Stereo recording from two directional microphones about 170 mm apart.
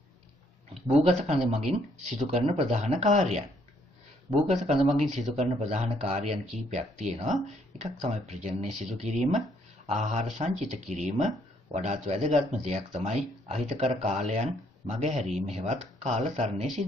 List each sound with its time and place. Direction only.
0.8 s speech: 40° right (ahead or behind)